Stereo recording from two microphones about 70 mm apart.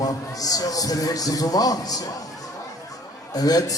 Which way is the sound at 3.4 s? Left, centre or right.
Left.